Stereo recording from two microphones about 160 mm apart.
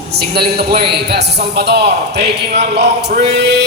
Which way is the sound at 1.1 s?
90° right.